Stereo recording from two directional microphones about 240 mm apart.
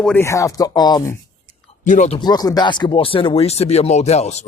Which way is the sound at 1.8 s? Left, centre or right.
Left.